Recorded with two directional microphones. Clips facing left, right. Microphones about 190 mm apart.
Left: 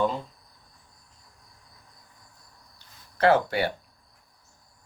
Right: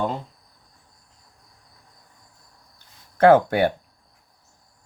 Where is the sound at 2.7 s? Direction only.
50° right (ahead or behind).